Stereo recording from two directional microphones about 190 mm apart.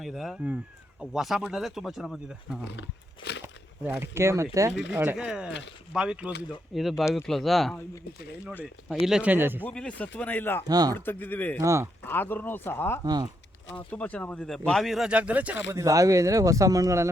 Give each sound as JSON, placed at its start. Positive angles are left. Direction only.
{"t": 0.0, "sound": "speech", "side_deg": 0}
{"t": 2.6, "sound": "speech", "side_deg": 65}
{"t": 3.4, "sound": "speech", "side_deg": -10}
{"t": 5.5, "sound": "speech", "side_deg": 70}
{"t": 5.9, "sound": "speech", "side_deg": -5}
{"t": 9.0, "sound": "speech", "side_deg": -5}
{"t": 9.6, "sound": "speech", "side_deg": 5}
{"t": 10.7, "sound": "speech", "side_deg": -20}
{"t": 10.9, "sound": "speech", "side_deg": 10}
{"t": 11.6, "sound": "speech", "side_deg": -15}
{"t": 12.0, "sound": "speech", "side_deg": 10}